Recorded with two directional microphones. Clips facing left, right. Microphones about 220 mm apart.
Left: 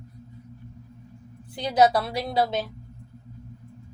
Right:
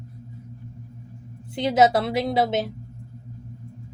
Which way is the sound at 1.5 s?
25° right (ahead or behind).